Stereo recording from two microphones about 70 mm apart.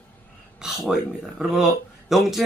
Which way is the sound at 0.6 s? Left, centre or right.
Centre.